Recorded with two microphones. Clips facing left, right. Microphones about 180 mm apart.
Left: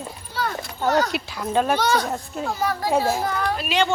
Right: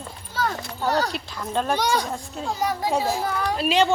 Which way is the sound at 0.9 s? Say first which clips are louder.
Left 3 dB; 35° right (ahead or behind).